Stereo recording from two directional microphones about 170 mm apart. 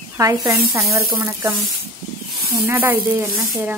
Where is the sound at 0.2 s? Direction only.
20° right (ahead or behind).